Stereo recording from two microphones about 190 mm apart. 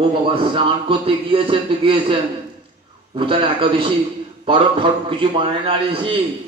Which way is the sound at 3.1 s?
30° right (ahead or behind).